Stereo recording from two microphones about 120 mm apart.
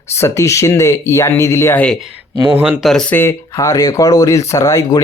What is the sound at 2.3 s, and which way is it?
Speech, 10° right (ahead or behind).